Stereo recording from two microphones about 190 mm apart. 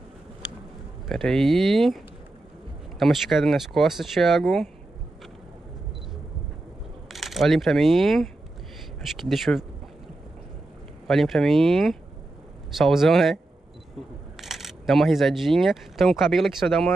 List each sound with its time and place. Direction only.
1.0 s speech: centre (ahead or behind)
3.0 s speech: centre (ahead or behind)
7.1 s speech: centre (ahead or behind)
11.1 s speech: centre (ahead or behind)
14.4 s speech: centre (ahead or behind)